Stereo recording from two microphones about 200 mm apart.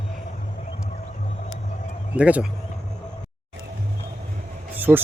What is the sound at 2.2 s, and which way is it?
Speech, 5° right (ahead or behind).